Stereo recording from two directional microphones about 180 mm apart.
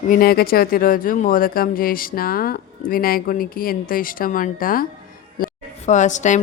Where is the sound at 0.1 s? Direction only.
55° left (ahead or behind).